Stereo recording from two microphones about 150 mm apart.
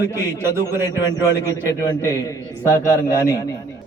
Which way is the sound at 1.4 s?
20° left (ahead or behind).